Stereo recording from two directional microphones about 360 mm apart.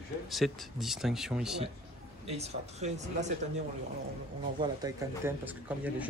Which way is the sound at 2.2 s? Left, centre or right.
Centre.